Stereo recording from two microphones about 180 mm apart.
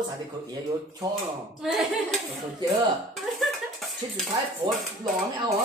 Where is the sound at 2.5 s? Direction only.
20° right (ahead or behind).